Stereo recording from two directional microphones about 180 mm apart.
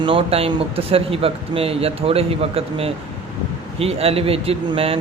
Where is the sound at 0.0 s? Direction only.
30° right (ahead or behind).